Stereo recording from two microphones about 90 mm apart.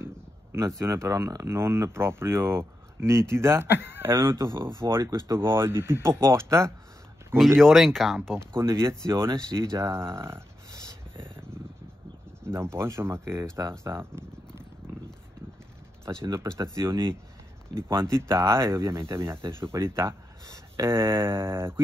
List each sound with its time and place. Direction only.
0.0 s a sound: 30° right (ahead or behind)
0.7 s speech: 35° right (ahead or behind)
7.6 s speech: centre (ahead or behind)
8.5 s speech: 30° right (ahead or behind)
12.4 s speech: 30° right (ahead or behind)
13.8 s a sound: 30° right (ahead or behind)
16.3 s speech: 30° right (ahead or behind)